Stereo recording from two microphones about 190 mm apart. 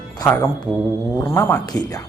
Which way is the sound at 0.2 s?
20° left (ahead or behind).